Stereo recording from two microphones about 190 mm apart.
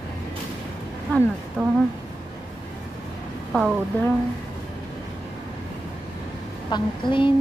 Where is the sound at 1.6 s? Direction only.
5° left (ahead or behind).